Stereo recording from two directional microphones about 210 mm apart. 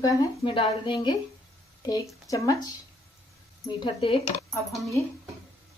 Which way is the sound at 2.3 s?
15° left (ahead or behind).